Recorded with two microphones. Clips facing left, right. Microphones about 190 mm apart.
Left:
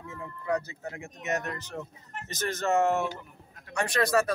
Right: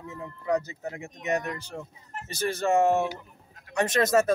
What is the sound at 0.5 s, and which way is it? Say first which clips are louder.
Speech: right 3 dB; 15° right (ahead or behind).